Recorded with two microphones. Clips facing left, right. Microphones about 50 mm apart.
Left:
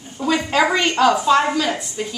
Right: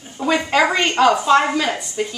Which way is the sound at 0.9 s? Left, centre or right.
Right.